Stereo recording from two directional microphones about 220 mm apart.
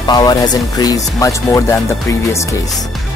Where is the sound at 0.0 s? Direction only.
20° left (ahead or behind).